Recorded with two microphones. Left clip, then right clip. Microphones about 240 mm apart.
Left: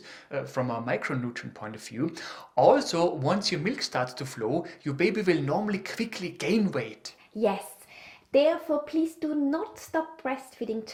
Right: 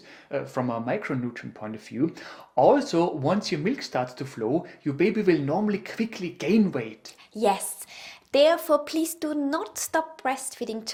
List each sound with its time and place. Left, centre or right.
0.3 s speech: left
8.3 s a woman's voice: right